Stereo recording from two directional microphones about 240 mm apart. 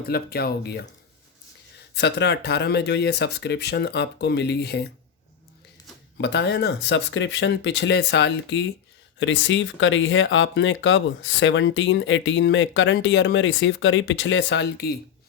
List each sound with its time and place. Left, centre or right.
0.1 s speech: left
2.0 s speech: left
6.1 s speech: left